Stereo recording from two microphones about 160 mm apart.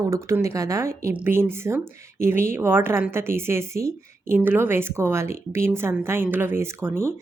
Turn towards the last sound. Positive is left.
turn(degrees=-15)  # may be behind; listen again after turning